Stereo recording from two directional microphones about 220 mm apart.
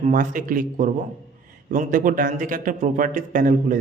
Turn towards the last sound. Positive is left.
turn(degrees=-40)  # may be behind; listen again after turning